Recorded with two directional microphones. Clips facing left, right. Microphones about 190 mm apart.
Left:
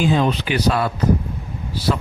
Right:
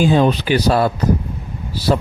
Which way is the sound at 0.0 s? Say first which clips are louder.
Right 4 dB; 40° right (ahead or behind).